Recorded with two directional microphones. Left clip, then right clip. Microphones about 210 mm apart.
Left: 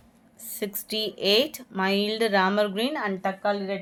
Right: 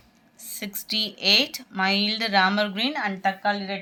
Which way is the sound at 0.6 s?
55° left (ahead or behind).